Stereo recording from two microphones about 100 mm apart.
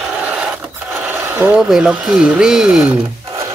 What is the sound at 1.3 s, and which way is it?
Speech, 20° right (ahead or behind).